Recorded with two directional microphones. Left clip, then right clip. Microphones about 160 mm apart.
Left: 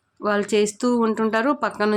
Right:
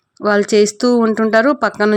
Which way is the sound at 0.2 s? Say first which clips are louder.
Right 8 dB; 40° right (ahead or behind).